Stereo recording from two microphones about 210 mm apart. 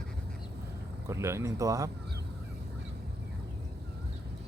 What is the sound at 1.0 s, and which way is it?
Speech, 15° right (ahead or behind).